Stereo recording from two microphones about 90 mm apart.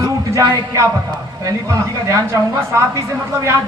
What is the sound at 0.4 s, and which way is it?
Speech, 45° right (ahead or behind).